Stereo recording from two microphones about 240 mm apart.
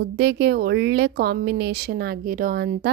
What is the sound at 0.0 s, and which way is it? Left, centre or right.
Speech, right.